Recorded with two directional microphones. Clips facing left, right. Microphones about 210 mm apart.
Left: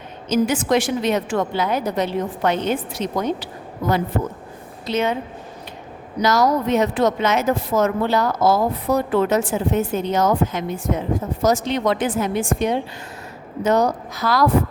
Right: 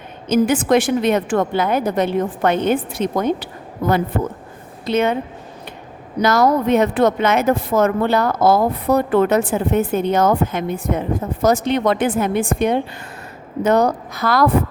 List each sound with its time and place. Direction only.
0.3 s speech: 55° right (ahead or behind)
6.2 s speech: 55° right (ahead or behind)